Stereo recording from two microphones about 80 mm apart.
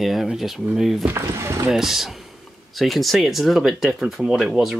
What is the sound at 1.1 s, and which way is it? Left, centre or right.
Speech, right.